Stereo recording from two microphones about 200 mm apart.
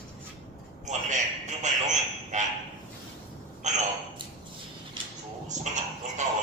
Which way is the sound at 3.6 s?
35° right (ahead or behind).